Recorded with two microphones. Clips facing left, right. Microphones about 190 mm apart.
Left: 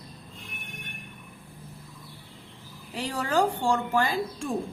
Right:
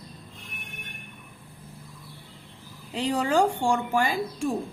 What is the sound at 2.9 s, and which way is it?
A woman's voice, 20° right (ahead or behind).